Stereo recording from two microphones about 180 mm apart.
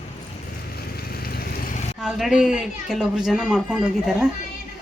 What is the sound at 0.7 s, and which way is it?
Vehicle, 60° left (ahead or behind).